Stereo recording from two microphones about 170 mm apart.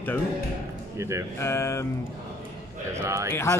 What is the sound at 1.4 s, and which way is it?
Speech, 15° left (ahead or behind).